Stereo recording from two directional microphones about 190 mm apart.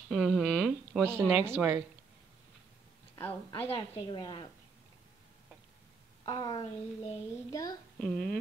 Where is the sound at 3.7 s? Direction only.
25° left (ahead or behind).